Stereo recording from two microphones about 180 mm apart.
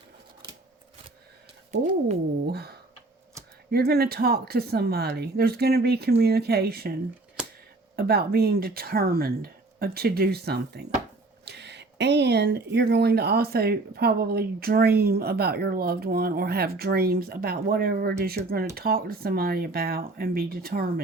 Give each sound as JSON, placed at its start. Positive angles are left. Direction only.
{"t": 2.5, "sound": "speech", "side_deg": -60}
{"t": 7.9, "sound": "speech", "side_deg": -60}